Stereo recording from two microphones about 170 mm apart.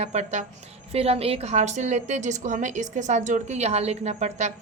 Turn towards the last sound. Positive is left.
turn(degrees=-45)  # may be behind; listen again after turning